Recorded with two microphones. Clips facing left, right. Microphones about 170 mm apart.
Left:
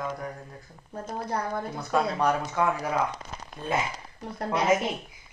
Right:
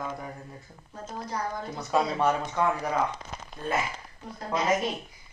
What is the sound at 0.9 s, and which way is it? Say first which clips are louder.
Speech: left 3 dB; 55° left (ahead or behind).